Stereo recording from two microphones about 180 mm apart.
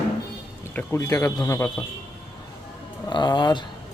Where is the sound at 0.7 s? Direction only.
15° left (ahead or behind).